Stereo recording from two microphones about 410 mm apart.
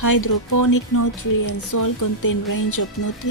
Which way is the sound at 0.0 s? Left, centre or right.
Left.